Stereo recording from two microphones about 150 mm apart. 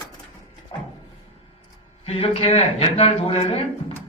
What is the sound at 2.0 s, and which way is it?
Speech, 40° left (ahead or behind).